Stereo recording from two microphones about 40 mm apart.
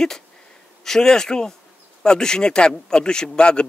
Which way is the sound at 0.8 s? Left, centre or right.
Centre.